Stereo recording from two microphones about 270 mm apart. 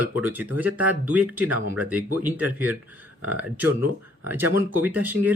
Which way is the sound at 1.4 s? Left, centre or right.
Right.